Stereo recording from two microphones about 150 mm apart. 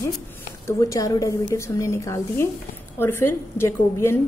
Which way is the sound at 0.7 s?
20° left (ahead or behind).